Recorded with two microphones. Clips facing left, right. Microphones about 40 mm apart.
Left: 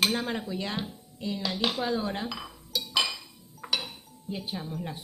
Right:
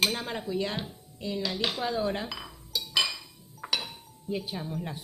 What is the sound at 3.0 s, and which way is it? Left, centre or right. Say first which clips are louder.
Chink: right 1 dB; centre.